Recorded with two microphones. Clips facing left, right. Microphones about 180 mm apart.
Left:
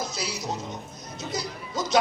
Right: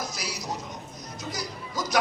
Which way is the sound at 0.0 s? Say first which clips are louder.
Left 3 dB; 25° left (ahead or behind).